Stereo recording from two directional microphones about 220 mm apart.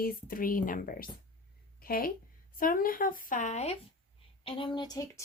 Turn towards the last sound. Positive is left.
turn(degrees=15)  # may be behind; listen again after turning